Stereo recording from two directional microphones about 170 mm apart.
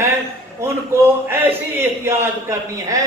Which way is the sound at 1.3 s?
15° right (ahead or behind).